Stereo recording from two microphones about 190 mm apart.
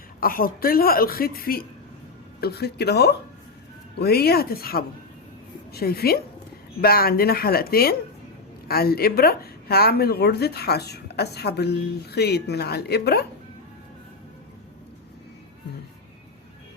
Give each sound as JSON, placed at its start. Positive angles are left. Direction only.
{"t": 0.2, "sound": "a woman's voice", "side_deg": 50}